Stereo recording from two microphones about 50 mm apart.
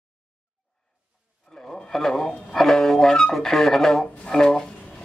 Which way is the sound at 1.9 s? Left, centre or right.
Centre.